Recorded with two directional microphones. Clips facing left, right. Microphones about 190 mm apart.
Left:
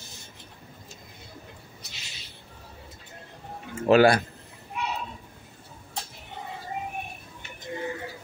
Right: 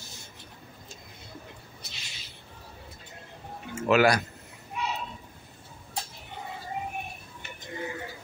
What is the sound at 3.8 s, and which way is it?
Speech, 35° left (ahead or behind).